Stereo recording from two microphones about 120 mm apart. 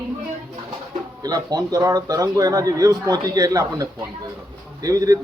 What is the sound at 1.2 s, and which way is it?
A man's voice, 30° right (ahead or behind).